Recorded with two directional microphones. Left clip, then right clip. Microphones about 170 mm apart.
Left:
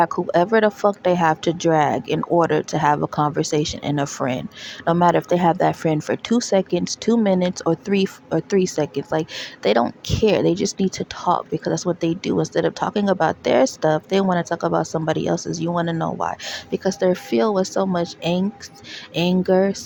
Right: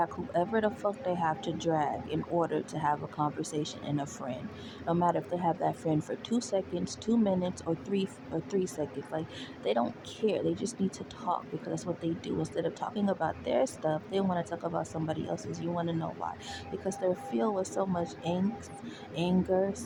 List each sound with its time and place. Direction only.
0.0 s speech: 40° left (ahead or behind)